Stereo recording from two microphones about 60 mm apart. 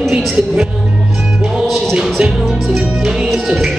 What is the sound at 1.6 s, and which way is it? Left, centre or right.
Music, centre.